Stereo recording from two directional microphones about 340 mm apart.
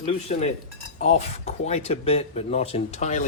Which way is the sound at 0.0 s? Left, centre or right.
Centre.